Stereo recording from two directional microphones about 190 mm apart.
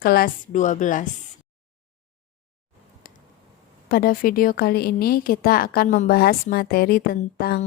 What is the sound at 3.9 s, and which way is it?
Speech, 50° left (ahead or behind).